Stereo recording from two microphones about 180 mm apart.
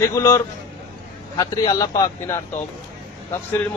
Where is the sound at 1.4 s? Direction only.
20° left (ahead or behind).